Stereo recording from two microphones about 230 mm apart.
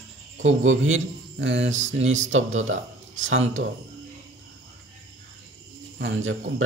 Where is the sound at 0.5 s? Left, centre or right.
Right.